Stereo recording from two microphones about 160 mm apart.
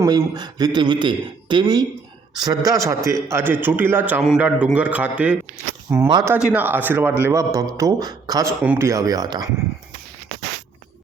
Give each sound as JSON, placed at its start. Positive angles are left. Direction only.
{"t": 0.0, "sound": "a man's voice", "side_deg": -25}